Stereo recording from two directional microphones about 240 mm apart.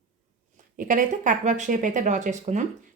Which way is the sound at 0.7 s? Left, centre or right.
Right.